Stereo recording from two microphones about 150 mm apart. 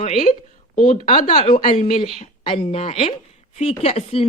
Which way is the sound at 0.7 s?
65° left (ahead or behind).